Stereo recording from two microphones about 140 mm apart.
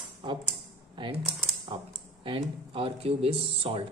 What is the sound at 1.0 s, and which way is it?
Speech, 35° right (ahead or behind).